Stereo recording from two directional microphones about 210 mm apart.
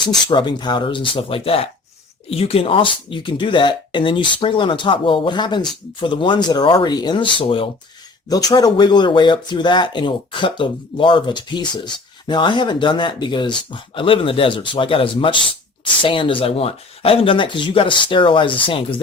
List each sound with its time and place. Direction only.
0.3 s speech: 20° left (ahead or behind)